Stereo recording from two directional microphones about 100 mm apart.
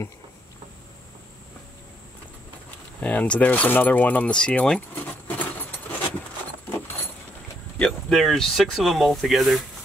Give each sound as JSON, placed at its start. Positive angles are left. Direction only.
{"t": 3.0, "sound": "speech", "side_deg": 15}
{"t": 5.3, "sound": "keys jangling", "side_deg": 20}
{"t": 7.8, "sound": "speech", "side_deg": 5}